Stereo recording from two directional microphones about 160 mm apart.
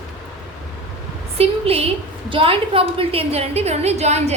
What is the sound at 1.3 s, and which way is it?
A woman's voice, 35° right (ahead or behind).